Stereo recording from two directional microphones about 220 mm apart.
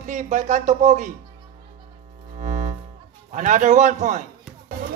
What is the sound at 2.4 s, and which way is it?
Music, 35° right (ahead or behind).